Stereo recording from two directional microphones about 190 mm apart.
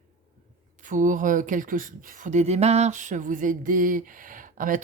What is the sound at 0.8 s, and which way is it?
Speech, 40° right (ahead or behind).